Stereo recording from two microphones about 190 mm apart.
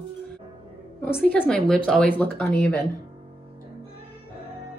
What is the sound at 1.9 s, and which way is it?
Speech, 5° left (ahead or behind).